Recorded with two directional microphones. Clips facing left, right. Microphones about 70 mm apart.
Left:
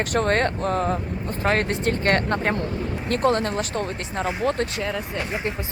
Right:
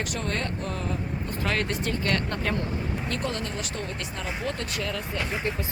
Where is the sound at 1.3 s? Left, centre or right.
Left.